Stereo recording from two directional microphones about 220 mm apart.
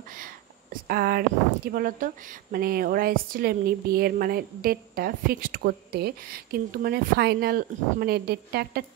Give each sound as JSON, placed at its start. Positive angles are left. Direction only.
{"t": 0.8, "sound": "a woman's voice", "side_deg": -45}